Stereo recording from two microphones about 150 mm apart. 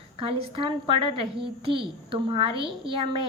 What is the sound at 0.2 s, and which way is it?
A woman's voice, 40° right (ahead or behind).